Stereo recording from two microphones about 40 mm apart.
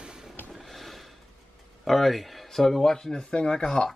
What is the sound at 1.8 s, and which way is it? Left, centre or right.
Speech, centre.